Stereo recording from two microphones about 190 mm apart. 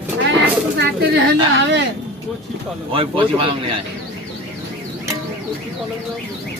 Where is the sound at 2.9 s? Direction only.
30° right (ahead or behind).